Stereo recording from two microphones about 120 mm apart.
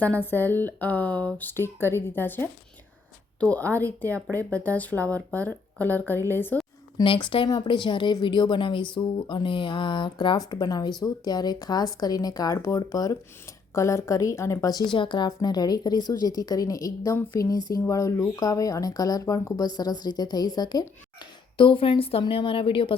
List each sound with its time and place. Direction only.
0.0 s speech: 15° left (ahead or behind)
6.9 s a woman's voice: 40° left (ahead or behind)
14.9 s a woman's voice: 40° left (ahead or behind)